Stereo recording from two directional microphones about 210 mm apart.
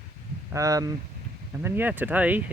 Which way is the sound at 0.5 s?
15° right (ahead or behind).